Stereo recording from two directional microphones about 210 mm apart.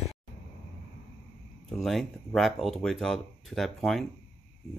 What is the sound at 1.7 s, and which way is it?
Speech, centre (ahead or behind).